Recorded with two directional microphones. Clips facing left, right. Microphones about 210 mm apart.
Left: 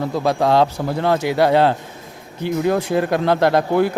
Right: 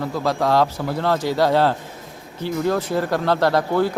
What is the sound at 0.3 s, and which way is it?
Speech, 20° left (ahead or behind).